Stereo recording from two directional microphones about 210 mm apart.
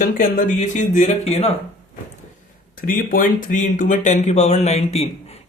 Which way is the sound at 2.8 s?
40° left (ahead or behind).